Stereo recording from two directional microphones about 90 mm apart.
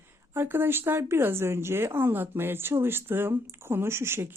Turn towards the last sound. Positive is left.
turn(degrees=-25)  # may be behind; listen again after turning